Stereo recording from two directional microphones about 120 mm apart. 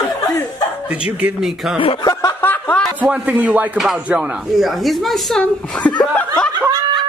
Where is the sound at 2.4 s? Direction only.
15° left (ahead or behind).